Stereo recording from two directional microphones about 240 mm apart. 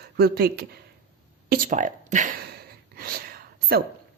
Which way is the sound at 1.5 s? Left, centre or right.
Right.